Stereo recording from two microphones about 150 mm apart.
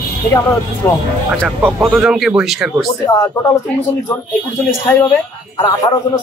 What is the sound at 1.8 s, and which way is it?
Speech, 5° right (ahead or behind).